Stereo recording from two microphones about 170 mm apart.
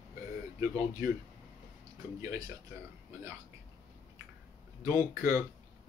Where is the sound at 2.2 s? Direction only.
20° right (ahead or behind).